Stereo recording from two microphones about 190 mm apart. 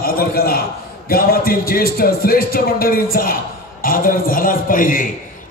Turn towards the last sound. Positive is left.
turn(degrees=45)  # may be behind; listen again after turning